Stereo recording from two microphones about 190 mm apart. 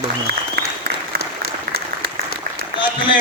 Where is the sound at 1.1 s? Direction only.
55° right (ahead or behind).